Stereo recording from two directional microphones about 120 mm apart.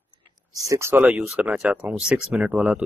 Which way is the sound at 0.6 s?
25° right (ahead or behind).